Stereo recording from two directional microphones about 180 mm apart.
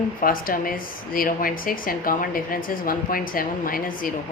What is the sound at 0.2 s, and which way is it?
A woman's voice, 50° left (ahead or behind).